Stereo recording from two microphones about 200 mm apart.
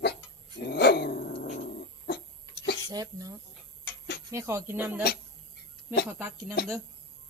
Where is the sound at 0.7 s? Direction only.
55° left (ahead or behind).